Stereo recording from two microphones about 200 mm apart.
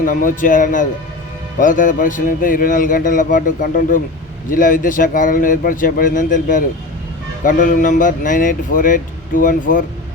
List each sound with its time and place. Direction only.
0.0 s speech: 40° left (ahead or behind)